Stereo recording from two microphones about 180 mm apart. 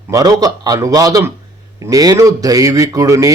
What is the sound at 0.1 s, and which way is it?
A man's voice, 20° right (ahead or behind).